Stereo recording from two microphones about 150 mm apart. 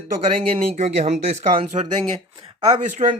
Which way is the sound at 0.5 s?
50° right (ahead or behind).